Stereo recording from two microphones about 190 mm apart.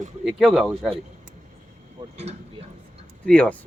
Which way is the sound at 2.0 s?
35° right (ahead or behind).